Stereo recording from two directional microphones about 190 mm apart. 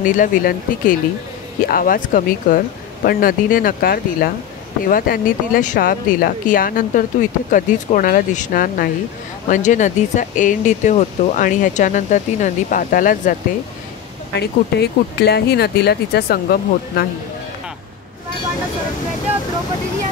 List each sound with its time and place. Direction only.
0.0 s speech: 45° left (ahead or behind)
14.3 s speech: 60° left (ahead or behind)